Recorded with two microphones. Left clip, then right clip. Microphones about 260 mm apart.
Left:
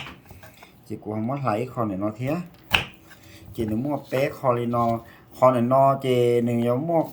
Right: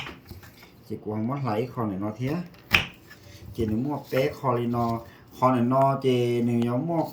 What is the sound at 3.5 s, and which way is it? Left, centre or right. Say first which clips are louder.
Speech: left 2 dB; centre.